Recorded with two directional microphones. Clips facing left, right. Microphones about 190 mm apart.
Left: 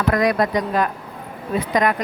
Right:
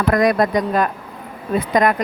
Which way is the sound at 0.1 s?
45° right (ahead or behind).